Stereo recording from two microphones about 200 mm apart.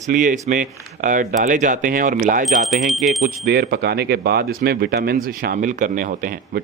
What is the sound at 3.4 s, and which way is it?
Speech, 50° right (ahead or behind).